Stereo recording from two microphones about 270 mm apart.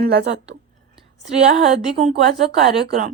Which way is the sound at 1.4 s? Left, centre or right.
Right.